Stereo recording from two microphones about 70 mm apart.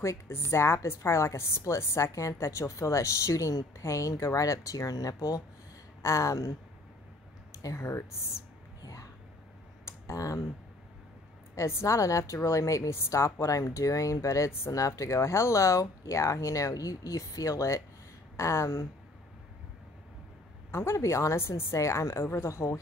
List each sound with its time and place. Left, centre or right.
0.0 s a woman's voice: left
6.0 s speech: left
7.6 s a woman's voice: left
9.8 s computer keyboard: left
11.5 s speech: left
20.7 s a woman's voice: left